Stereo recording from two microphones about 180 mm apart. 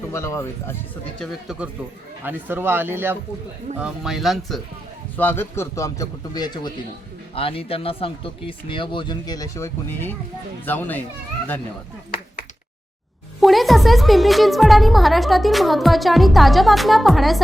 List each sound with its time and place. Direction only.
0.1 s a man's voice: 15° left (ahead or behind)
1.2 s a woman's voice: 5° right (ahead or behind)
5.1 s a man's voice: 10° left (ahead or behind)
13.4 s a woman's voice: centre (ahead or behind)